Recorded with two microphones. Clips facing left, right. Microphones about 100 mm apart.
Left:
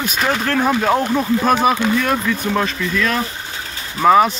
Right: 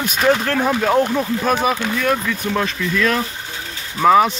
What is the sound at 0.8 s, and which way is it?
Speech, 10° left (ahead or behind).